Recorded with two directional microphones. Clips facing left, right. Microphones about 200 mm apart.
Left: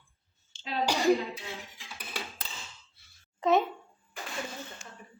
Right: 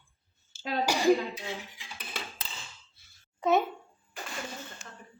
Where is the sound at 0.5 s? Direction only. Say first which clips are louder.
Right 7 dB; 5° right (ahead or behind).